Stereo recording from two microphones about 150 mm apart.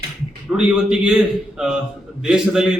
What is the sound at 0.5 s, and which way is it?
A man's voice, 5° right (ahead or behind).